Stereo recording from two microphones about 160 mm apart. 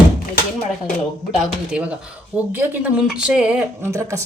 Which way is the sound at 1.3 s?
5° right (ahead or behind).